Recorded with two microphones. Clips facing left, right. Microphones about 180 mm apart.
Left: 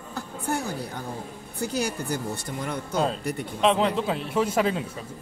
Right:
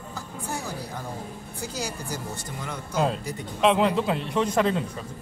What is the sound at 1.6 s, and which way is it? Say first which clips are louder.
Speech: left 6 dB; 60° left (ahead or behind).